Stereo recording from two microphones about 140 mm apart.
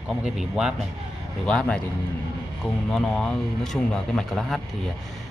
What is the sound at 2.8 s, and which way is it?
Speech, 5° left (ahead or behind).